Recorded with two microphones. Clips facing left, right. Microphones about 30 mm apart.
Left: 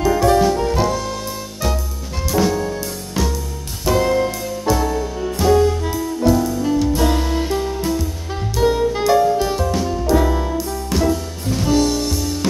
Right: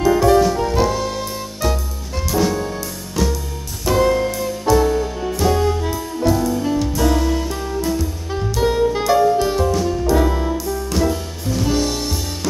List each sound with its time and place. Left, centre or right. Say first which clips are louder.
0.0 s jazz: right 1 dB; centre
0.4 s music: even; centre
3.2 s music: right 1 dB; centre
3.8 s music: even; centre
4.8 s music: right 2 dB; centre
7.0 s music: right 1 dB; centre
7.8 s music: even; centre
8.5 s saxophone: left 1 dB; centre
9.8 s music: even; centre